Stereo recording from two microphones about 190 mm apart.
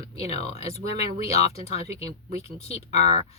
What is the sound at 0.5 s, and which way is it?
Speech, 35° left (ahead or behind).